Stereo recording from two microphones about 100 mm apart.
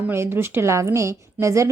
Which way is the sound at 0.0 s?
25° right (ahead or behind).